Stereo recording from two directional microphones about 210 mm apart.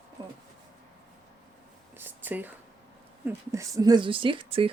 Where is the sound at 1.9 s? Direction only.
10° right (ahead or behind).